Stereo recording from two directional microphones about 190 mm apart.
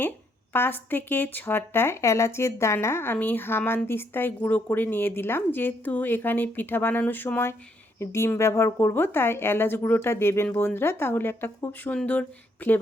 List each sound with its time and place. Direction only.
0.5 s speech: 10° left (ahead or behind)